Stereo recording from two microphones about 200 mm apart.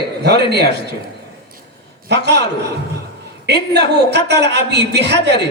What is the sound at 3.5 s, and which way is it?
A woman's voice, 55° right (ahead or behind).